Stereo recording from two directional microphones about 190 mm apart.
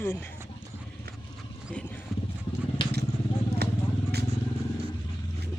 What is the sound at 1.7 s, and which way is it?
Clip-clop, 5° left (ahead or behind).